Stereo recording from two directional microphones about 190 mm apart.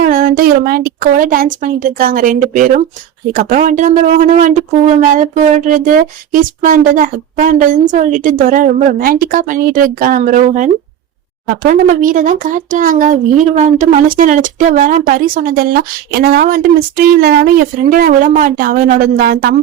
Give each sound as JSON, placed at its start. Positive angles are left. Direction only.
{"t": 0.0, "sound": "speech", "side_deg": -45}